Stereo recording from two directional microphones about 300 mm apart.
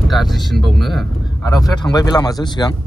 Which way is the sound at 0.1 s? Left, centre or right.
Centre.